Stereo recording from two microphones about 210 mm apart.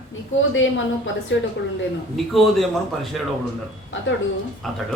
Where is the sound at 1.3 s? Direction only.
65° left (ahead or behind).